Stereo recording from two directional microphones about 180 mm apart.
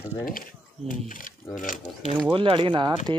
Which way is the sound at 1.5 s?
45° left (ahead or behind).